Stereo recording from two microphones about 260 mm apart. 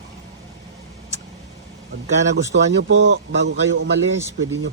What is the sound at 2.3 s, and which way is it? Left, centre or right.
Speech, right.